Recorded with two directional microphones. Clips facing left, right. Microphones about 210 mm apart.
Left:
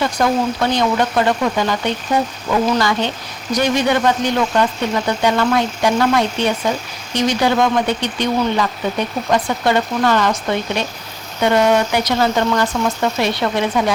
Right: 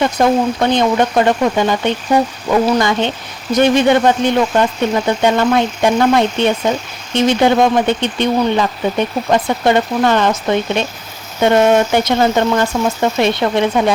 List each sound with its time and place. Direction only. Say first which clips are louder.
0.0 s speech: right 4 dB; 25° right (ahead or behind)
11.3 s speech: right 3 dB; 25° right (ahead or behind)